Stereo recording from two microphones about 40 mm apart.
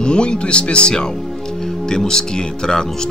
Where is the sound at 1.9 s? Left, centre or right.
Centre.